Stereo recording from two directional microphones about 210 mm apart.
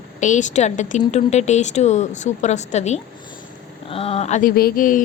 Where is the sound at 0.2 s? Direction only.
35° left (ahead or behind).